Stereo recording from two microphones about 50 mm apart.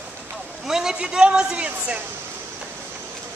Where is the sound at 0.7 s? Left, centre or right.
Centre; by 2.0 s right.